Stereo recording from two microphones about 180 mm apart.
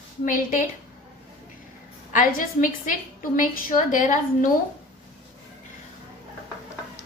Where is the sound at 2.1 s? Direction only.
50° left (ahead or behind).